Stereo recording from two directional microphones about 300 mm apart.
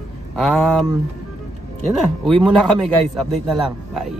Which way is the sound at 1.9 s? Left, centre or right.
Centre.